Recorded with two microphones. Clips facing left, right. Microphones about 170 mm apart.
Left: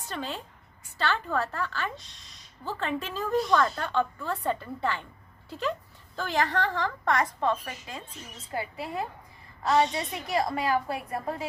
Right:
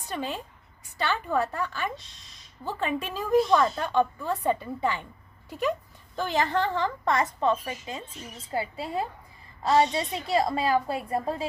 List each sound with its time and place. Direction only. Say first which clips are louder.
0.1 s a woman's voice: right 3 dB; 15° right (ahead or behind)